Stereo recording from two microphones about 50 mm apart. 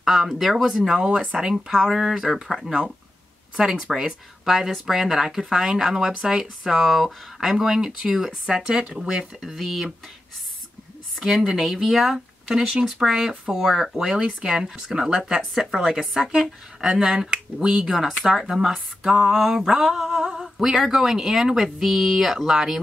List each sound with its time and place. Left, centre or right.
0.0 s speech: centre
0.3 s speech: centre
0.8 s speech: centre
9.4 s speech: centre
11.1 s speech: centre
14.0 s speech: right